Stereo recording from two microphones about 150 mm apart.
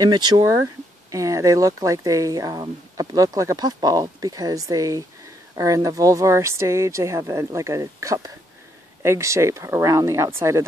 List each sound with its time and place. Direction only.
0.0 s speech: 30° right (ahead or behind)